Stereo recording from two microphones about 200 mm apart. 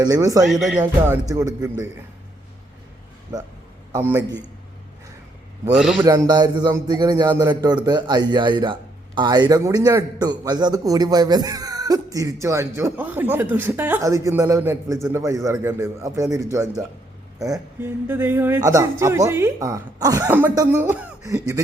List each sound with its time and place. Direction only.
0.0 s speech: 20° right (ahead or behind)
3.9 s speech: 15° right (ahead or behind)
5.7 s a man's voice: centre (ahead or behind)
6.0 s a man's voice: 15° right (ahead or behind)